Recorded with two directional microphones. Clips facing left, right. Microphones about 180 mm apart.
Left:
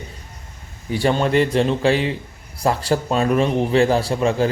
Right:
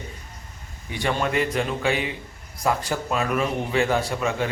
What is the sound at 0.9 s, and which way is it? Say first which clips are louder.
A man's voice: left 6 dB; 35° left (ahead or behind).